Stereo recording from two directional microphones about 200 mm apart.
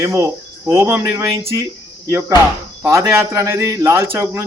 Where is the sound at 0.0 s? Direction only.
15° right (ahead or behind).